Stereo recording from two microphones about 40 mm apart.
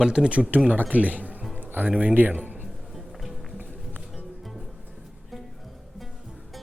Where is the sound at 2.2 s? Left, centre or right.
Right.